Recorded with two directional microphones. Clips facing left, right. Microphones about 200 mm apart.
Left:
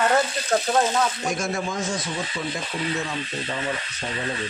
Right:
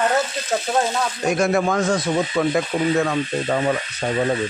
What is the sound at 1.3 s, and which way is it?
Speech, 65° right (ahead or behind).